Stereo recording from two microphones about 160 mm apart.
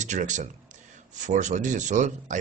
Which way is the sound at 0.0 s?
50° right (ahead or behind).